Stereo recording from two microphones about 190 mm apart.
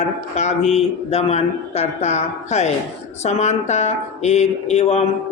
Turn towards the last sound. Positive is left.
turn(degrees=35)  # may be behind; listen again after turning